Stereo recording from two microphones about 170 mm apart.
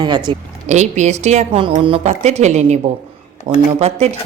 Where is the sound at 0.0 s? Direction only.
25° right (ahead or behind).